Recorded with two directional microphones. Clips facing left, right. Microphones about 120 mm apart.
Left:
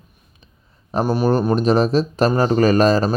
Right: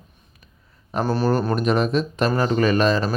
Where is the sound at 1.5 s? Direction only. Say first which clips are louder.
Left 4 dB; 30° left (ahead or behind).